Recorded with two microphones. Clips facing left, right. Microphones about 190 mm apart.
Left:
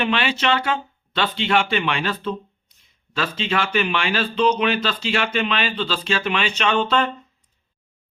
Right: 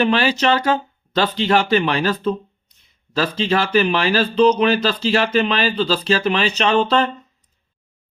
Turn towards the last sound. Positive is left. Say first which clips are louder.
# right 3 dB
turn(degrees=-35)  # may be behind; listen again after turning